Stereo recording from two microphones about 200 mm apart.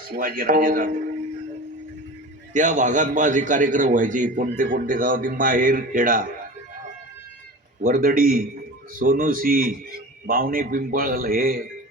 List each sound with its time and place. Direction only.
0.2 s a man's voice: 45° right (ahead or behind)
2.5 s a man's voice: 40° right (ahead or behind)
7.8 s a man's voice: 45° right (ahead or behind)